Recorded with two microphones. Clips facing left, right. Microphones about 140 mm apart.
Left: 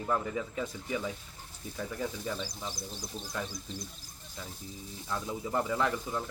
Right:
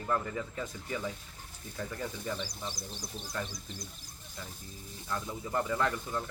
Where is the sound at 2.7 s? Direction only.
50° left (ahead or behind).